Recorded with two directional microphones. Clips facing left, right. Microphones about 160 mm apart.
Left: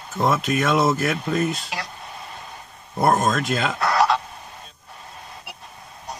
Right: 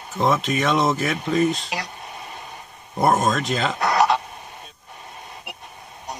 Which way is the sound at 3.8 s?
20° right (ahead or behind).